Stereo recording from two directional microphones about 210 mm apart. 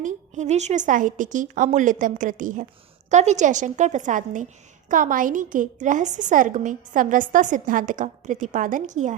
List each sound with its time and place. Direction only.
0.0 s a woman's voice: 35° right (ahead or behind)